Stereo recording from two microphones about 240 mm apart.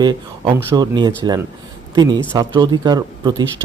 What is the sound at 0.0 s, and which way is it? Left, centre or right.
A man's voice, centre.